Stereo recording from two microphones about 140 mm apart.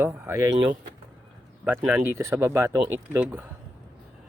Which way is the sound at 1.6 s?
15° right (ahead or behind).